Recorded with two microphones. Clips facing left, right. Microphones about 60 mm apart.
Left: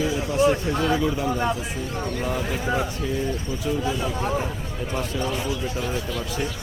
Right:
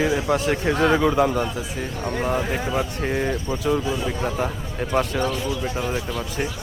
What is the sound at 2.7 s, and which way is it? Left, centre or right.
Speech, right.